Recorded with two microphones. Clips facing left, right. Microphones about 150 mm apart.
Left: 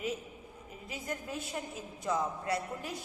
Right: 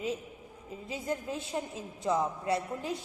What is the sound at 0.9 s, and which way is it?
A woman's voice, 25° right (ahead or behind).